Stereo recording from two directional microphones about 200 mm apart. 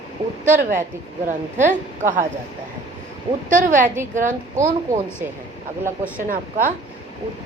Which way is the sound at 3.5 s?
40° right (ahead or behind).